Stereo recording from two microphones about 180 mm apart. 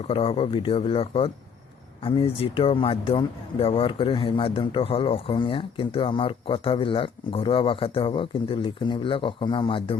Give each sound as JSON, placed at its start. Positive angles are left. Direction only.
{"t": 0.1, "sound": "speech", "side_deg": 30}